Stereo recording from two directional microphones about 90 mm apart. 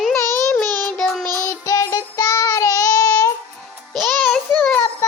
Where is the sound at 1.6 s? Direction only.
40° left (ahead or behind).